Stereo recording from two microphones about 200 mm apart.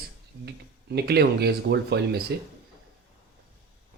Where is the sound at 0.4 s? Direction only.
55° right (ahead or behind).